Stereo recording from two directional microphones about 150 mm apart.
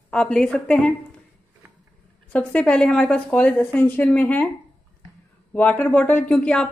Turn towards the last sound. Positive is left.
turn(degrees=5)  # may be behind; listen again after turning